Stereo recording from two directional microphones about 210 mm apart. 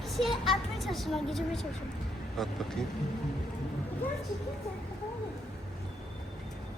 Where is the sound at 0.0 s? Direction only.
Centre (ahead or behind).